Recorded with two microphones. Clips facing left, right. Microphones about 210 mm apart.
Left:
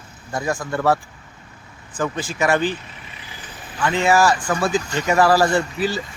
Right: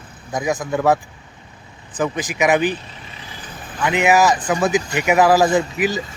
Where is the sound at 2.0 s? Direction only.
15° right (ahead or behind).